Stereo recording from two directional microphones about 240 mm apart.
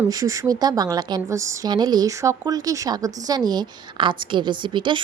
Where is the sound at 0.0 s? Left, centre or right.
Centre.